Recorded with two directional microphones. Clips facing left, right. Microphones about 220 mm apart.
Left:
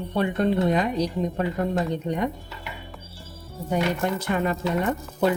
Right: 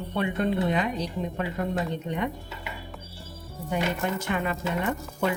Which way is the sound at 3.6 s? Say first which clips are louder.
Left 3 dB; 35° left (ahead or behind).